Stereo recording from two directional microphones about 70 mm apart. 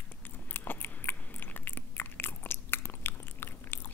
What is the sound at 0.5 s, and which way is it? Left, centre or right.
Biting, left.